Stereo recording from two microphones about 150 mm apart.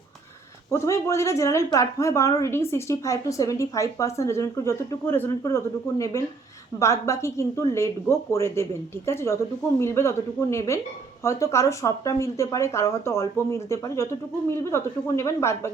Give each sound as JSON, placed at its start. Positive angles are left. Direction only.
{"t": 0.7, "sound": "a woman's voice", "side_deg": 20}